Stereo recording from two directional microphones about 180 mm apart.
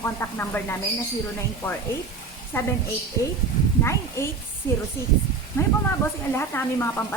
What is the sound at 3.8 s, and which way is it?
Speech, 15° left (ahead or behind).